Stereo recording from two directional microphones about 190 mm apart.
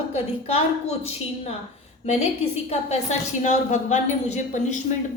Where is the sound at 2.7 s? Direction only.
35° left (ahead or behind).